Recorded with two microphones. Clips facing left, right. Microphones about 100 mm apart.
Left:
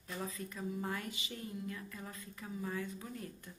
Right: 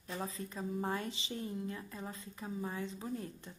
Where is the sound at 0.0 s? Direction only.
30° right (ahead or behind).